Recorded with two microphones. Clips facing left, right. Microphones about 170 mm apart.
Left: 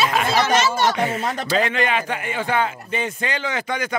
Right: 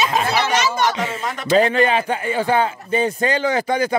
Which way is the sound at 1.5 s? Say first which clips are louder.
Right 7 dB; 35° right (ahead or behind).